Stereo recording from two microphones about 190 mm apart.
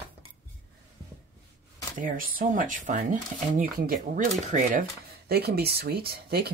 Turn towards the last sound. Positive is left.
turn(degrees=-55)  # may be behind; listen again after turning